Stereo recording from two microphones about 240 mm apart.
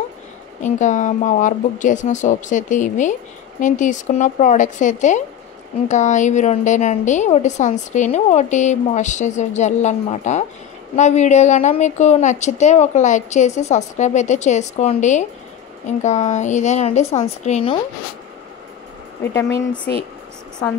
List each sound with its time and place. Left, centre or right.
0.6 s a woman's voice: left
19.3 s speech: centre